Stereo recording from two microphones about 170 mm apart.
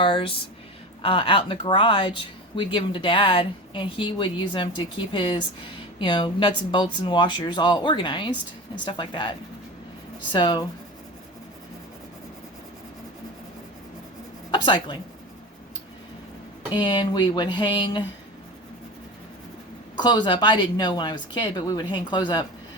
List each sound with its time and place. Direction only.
0.0 s speech: 30° left (ahead or behind)
10.3 s speech: 25° left (ahead or behind)
14.5 s speech: 30° left (ahead or behind)
16.7 s speech: 25° left (ahead or behind)
20.0 s speech: 25° left (ahead or behind)